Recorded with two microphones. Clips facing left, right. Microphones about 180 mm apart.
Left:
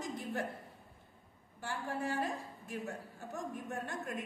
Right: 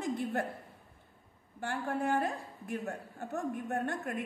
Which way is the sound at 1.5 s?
60° right (ahead or behind).